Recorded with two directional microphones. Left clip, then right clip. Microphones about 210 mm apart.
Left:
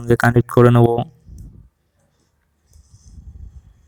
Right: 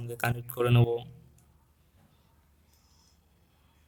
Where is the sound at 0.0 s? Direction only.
45° left (ahead or behind).